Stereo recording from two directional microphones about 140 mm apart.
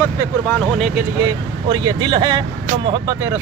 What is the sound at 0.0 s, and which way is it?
Speech, 20° left (ahead or behind).